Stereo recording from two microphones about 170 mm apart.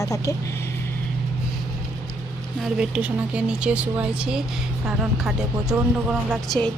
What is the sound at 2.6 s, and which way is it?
Speech, 5° right (ahead or behind).